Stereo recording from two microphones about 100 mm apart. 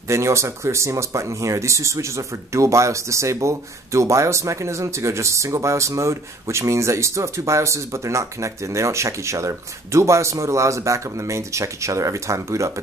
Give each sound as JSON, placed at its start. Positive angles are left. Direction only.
{"t": 0.1, "sound": "speech", "side_deg": -30}